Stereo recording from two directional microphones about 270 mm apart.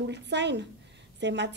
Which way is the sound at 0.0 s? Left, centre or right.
Right.